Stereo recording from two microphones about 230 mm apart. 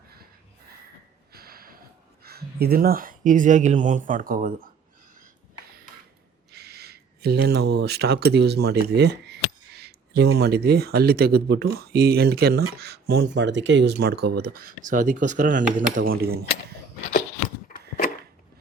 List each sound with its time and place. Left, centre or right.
1.3 s snort: right
2.2 s speech: right
6.5 s speech: right